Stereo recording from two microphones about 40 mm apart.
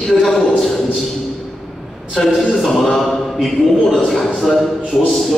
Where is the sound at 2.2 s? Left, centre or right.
Centre.